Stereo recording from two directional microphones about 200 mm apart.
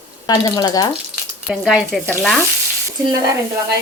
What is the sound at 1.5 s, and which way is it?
Speech, 5° right (ahead or behind).